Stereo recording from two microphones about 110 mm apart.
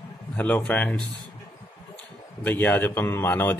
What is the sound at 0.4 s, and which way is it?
Speech, 15° left (ahead or behind).